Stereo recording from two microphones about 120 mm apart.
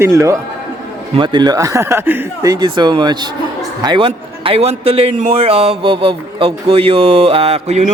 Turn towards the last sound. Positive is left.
turn(degrees=-65)  # may be behind; listen again after turning